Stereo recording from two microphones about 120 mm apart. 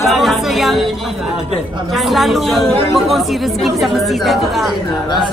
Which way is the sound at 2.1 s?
Centre (ahead or behind).